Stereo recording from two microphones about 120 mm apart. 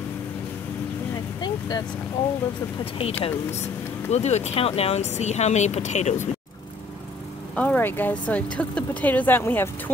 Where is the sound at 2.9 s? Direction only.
50° left (ahead or behind).